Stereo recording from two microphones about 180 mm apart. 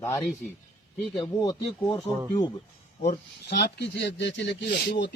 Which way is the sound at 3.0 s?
45° left (ahead or behind).